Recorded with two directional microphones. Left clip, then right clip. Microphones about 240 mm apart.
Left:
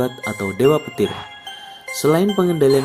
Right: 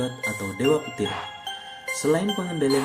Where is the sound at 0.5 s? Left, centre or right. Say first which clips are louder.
Left 8 dB; left.